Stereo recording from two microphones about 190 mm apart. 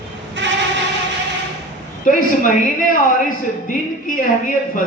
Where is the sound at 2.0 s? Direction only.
45° left (ahead or behind).